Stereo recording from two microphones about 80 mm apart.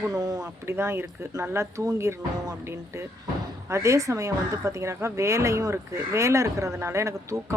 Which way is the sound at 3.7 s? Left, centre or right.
Right.